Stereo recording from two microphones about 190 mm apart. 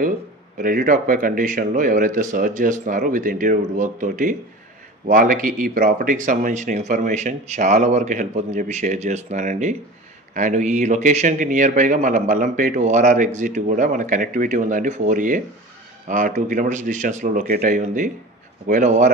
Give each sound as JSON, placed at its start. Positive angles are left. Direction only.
{"t": 0.6, "sound": "a man's voice", "side_deg": -45}